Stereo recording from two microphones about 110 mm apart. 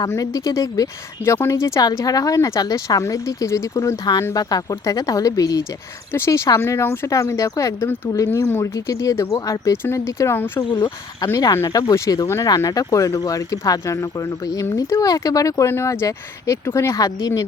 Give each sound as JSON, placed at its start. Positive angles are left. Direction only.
{"t": 0.2, "sound": "speech", "side_deg": 30}
{"t": 10.7, "sound": "speech", "side_deg": 40}